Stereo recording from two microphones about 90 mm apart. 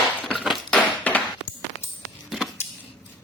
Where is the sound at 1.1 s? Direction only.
15° left (ahead or behind).